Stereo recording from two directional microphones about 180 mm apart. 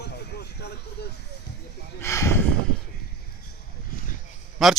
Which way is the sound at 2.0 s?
15° left (ahead or behind).